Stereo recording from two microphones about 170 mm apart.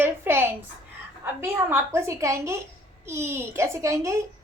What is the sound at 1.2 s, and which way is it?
A child's voice, 15° right (ahead or behind).